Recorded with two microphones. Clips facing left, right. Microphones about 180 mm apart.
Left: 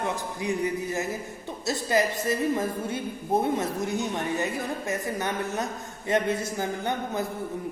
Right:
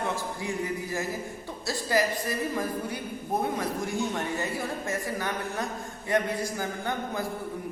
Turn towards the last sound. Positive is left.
turn(degrees=20)  # may be behind; listen again after turning